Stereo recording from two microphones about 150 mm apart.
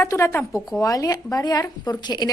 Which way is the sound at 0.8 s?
20° left (ahead or behind).